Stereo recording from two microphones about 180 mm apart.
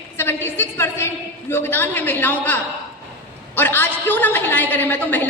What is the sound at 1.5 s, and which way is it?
A woman's voice, 10° left (ahead or behind).